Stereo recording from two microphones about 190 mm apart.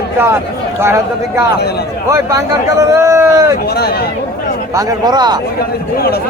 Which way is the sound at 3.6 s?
55° left (ahead or behind).